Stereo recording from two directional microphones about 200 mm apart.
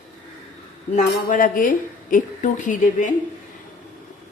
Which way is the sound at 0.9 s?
40° left (ahead or behind).